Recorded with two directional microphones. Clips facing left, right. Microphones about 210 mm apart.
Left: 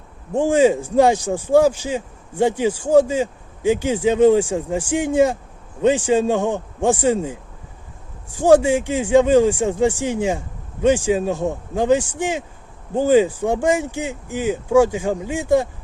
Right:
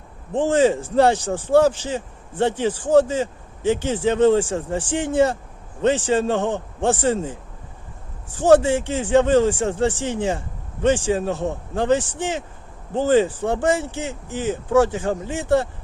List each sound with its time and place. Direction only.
0.3 s speech: 10° left (ahead or behind)